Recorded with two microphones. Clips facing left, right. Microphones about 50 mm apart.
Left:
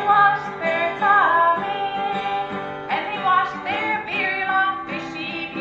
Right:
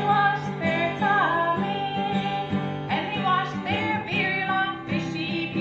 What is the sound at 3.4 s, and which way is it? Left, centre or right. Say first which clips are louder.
Music: left 4 dB; centre.